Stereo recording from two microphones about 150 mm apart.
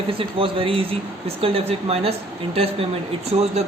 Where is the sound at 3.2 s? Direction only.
45° right (ahead or behind).